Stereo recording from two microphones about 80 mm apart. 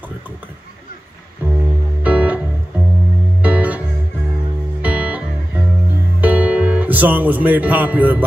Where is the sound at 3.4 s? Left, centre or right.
Centre.